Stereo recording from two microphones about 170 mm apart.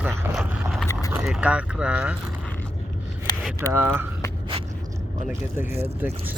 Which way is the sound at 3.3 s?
25° left (ahead or behind).